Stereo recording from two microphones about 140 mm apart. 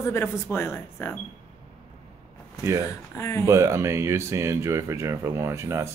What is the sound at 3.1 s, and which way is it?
Speech, 20° left (ahead or behind).